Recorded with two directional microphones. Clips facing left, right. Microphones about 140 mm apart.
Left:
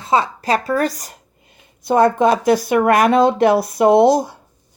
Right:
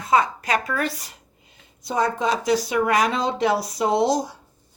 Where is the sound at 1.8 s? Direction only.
55° left (ahead or behind).